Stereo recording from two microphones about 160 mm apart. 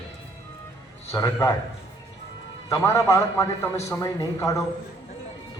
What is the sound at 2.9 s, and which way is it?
A man's voice, 20° left (ahead or behind).